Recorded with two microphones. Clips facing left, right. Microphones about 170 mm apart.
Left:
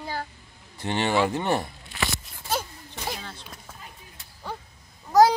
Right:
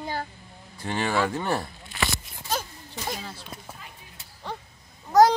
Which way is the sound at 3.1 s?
5° right (ahead or behind).